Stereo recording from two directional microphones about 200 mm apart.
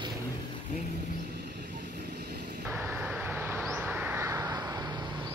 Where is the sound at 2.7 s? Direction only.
10° right (ahead or behind).